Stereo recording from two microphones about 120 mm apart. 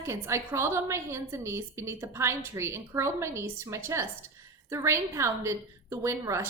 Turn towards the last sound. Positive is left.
turn(degrees=-25)  # may be behind; listen again after turning